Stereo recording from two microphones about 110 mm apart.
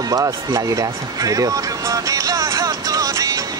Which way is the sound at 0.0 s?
30° right (ahead or behind).